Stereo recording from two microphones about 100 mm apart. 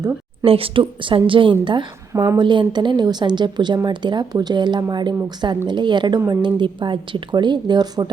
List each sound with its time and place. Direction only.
0.4 s speech: 70° right (ahead or behind)
2.1 s a woman's voice: 35° right (ahead or behind)
2.4 s speech: 50° right (ahead or behind)